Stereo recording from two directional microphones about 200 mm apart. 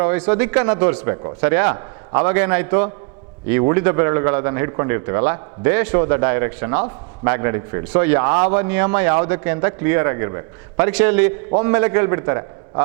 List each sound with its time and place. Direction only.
0.0 s a man's voice: 10° right (ahead or behind)